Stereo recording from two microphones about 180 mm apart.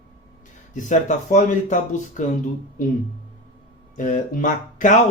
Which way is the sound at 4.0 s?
45° left (ahead or behind).